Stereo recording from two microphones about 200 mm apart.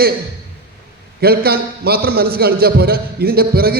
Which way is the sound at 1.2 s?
50° right (ahead or behind).